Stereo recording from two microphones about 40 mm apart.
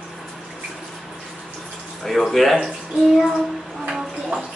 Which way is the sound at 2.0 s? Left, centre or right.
Centre.